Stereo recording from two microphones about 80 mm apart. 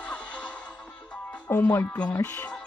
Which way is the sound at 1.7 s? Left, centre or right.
Left.